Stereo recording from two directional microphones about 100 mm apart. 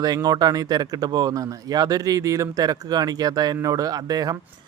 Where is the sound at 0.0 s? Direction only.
45° right (ahead or behind).